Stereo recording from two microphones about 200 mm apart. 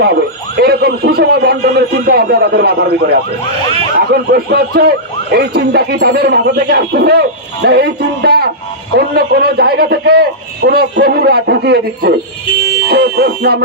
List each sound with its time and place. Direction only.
0.0 s a sound: 55° right (ahead or behind)
2.0 s speech: 55° right (ahead or behind)
12.9 s fire alarm: 55° right (ahead or behind)